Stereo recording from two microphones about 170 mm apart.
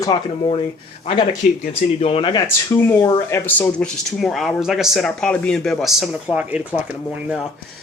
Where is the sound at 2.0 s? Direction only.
35° left (ahead or behind).